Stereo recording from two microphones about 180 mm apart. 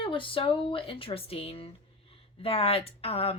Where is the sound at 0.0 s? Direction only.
30° left (ahead or behind).